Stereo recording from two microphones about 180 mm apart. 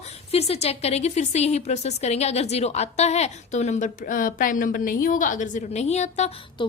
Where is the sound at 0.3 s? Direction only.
35° left (ahead or behind).